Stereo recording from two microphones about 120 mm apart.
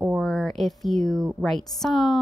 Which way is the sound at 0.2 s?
Centre (ahead or behind).